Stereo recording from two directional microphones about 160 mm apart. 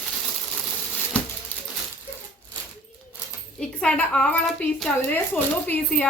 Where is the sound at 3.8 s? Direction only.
5° left (ahead or behind).